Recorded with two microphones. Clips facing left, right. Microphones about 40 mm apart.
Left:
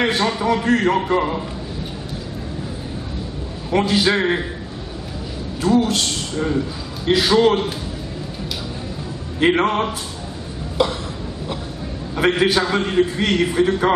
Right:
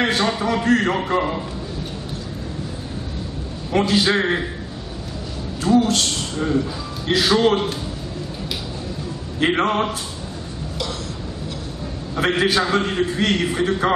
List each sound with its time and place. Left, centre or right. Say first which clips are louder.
0.0 s a man's voice: left 1 dB; centre
3.7 s a man's voice: left 1 dB; centre
5.6 s a man's voice: even; centre
9.4 s a man's voice: left 2 dB; centre
10.8 s a sound: left 9 dB; left
12.4 s a man's voice: left 1 dB; centre